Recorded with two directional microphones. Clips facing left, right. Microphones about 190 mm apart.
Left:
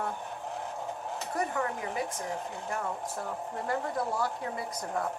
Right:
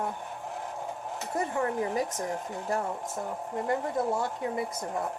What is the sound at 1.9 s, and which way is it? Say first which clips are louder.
Speech: right 3 dB; 40° right (ahead or behind).